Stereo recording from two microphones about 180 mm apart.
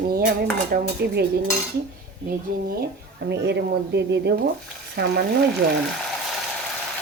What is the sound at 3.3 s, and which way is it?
Speech, 70° right (ahead or behind).